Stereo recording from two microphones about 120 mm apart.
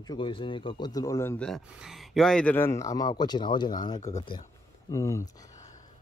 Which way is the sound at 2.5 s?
20° left (ahead or behind).